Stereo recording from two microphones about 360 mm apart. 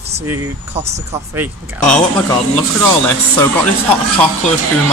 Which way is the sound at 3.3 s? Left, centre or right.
Centre.